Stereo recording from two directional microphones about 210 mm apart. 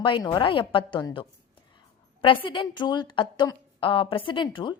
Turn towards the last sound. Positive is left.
turn(degrees=20)  # may be behind; listen again after turning